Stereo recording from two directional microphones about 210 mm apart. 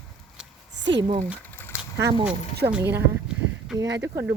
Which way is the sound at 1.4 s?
10° left (ahead or behind).